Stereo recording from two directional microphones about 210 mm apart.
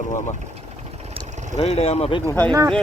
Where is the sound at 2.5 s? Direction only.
20° right (ahead or behind).